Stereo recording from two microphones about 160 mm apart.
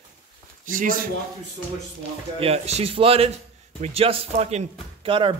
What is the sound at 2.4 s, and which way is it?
Speech, 40° right (ahead or behind).